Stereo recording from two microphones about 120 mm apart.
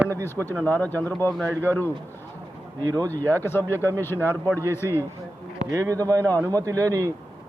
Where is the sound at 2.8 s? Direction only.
30° right (ahead or behind).